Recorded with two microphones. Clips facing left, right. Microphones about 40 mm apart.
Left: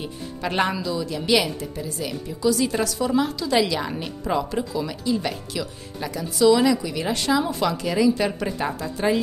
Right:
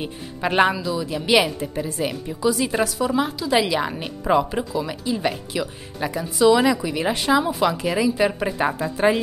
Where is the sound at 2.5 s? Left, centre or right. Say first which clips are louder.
Right 1 dB; centre.